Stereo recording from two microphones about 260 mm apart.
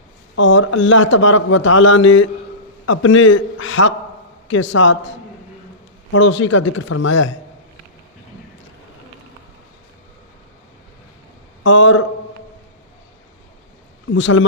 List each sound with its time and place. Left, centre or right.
0.3 s a man's voice: left
6.8 s speech: left
11.6 s a man's voice: left
14.1 s a man's voice: left